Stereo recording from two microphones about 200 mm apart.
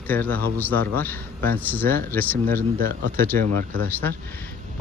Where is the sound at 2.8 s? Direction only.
45° right (ahead or behind).